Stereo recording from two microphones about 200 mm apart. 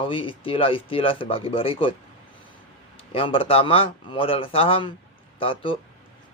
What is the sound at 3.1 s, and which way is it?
A man's voice, 25° left (ahead or behind).